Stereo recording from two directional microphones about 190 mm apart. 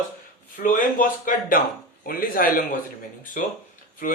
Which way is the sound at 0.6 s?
45° left (ahead or behind).